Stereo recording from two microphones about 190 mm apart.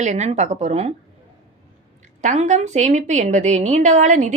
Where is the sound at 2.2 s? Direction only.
40° right (ahead or behind).